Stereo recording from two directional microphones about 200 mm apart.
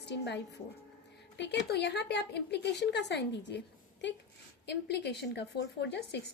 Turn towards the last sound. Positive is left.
turn(degrees=55)  # may be behind; listen again after turning